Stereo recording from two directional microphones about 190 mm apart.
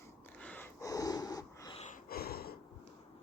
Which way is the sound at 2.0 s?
55° left (ahead or behind).